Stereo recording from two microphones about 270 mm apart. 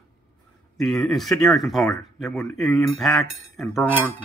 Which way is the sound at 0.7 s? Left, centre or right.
Centre.